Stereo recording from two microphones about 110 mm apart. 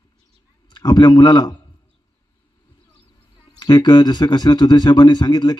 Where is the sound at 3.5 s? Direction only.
40° left (ahead or behind).